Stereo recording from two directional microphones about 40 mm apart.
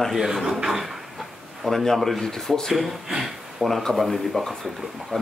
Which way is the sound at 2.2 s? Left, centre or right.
Centre.